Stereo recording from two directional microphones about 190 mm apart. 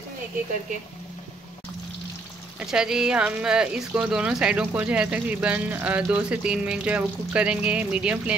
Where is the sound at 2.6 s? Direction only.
5° right (ahead or behind).